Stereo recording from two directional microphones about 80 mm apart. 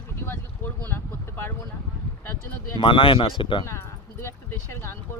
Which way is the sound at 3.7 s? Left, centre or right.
Left.